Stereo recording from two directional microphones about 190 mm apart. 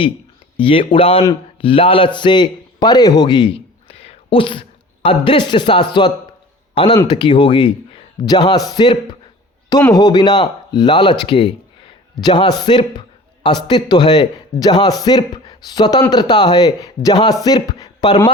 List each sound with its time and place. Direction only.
0.5 s a man's voice: 30° left (ahead or behind)